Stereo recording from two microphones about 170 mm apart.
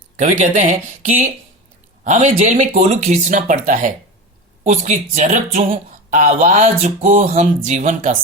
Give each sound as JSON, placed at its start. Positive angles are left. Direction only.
{"t": 0.2, "sound": "speech", "side_deg": -45}